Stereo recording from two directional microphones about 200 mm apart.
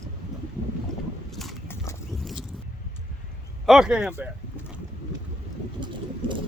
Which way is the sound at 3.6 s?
Centre (ahead or behind).